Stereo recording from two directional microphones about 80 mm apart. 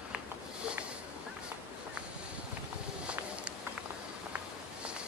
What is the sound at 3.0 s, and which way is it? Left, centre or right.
Insect, centre.